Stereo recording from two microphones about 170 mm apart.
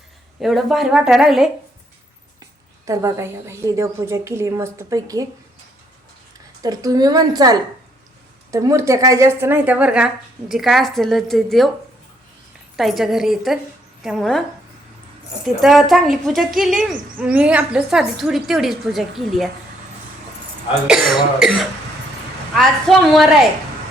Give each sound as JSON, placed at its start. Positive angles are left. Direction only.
{"t": 0.4, "sound": "a woman's voice", "side_deg": 0}
{"t": 2.8, "sound": "a woman's voice", "side_deg": -20}
{"t": 6.6, "sound": "a woman's voice", "side_deg": -20}
{"t": 12.7, "sound": "a woman's voice", "side_deg": 0}
{"t": 15.4, "sound": "a woman's voice", "side_deg": 0}
{"t": 20.8, "sound": "a woman's voice", "side_deg": -5}
{"t": 22.5, "sound": "a woman's voice", "side_deg": 0}